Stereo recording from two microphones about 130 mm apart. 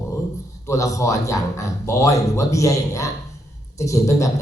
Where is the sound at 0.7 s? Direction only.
25° left (ahead or behind).